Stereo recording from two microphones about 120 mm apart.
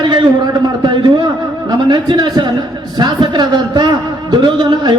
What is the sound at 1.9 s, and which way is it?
A man's voice, 35° right (ahead or behind).